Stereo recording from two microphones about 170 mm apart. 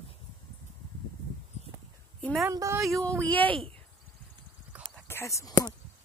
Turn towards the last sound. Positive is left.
turn(degrees=20)  # may be behind; listen again after turning